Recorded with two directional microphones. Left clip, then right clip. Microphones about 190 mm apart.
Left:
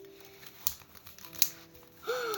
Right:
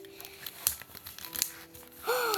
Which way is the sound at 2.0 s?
15° left (ahead or behind).